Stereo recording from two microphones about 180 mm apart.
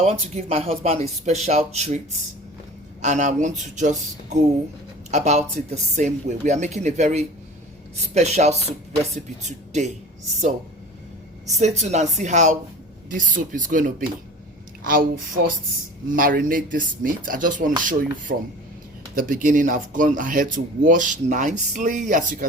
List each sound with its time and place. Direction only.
0.0 s speech: 35° right (ahead or behind)
3.0 s speech: 40° right (ahead or behind)
11.4 s speech: 40° right (ahead or behind)